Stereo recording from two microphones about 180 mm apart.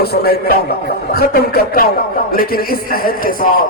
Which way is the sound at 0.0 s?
60° left (ahead or behind).